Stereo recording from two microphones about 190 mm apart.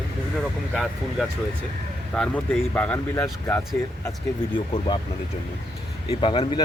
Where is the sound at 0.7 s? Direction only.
Centre (ahead or behind).